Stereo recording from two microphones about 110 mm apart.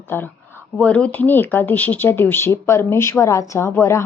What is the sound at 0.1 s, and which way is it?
Speech, 20° left (ahead or behind).